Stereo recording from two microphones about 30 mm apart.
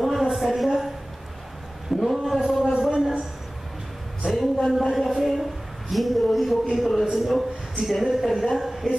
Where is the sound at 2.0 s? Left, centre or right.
Centre.